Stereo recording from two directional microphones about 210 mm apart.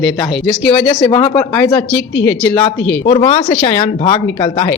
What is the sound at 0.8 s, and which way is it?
Speech, 20° left (ahead or behind).